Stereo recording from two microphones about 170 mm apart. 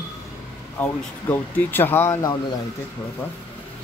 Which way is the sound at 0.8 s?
10° left (ahead or behind).